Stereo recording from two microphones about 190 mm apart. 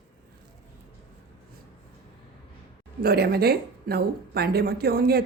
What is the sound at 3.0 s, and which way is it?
Speech, 55° right (ahead or behind).